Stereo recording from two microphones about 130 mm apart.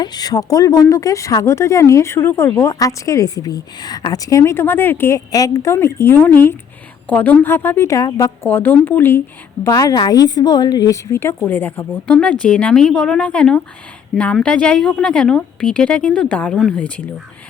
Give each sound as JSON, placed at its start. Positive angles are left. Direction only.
{"t": 0.0, "sound": "a woman's voice", "side_deg": 30}